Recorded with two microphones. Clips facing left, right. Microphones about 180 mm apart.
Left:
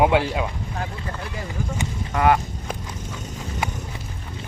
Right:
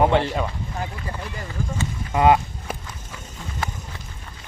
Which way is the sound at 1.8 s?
15° left (ahead or behind).